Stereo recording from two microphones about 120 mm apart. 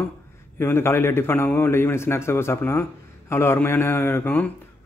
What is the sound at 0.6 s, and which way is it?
A man's voice, 20° left (ahead or behind).